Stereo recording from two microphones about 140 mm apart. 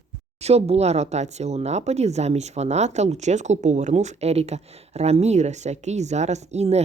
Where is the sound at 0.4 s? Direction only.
50° right (ahead or behind).